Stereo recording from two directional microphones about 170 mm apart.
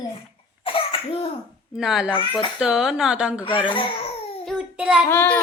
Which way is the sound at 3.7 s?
30° left (ahead or behind).